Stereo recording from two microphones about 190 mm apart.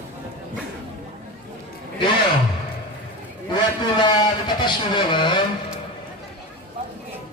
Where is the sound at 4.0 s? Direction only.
25° left (ahead or behind).